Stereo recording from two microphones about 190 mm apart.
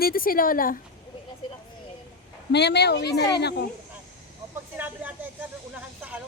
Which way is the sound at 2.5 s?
60° left (ahead or behind).